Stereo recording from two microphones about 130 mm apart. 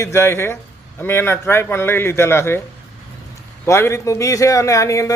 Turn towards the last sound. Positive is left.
turn(degrees=25)  # may be behind; listen again after turning